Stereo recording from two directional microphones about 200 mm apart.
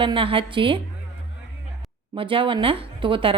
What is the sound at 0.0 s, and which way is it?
Speech, 25° right (ahead or behind).